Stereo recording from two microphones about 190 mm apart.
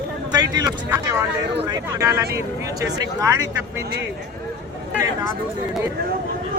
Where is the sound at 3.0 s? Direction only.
20° right (ahead or behind).